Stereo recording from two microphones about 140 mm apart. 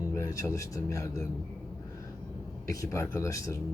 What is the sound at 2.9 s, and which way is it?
Speech, 20° left (ahead or behind).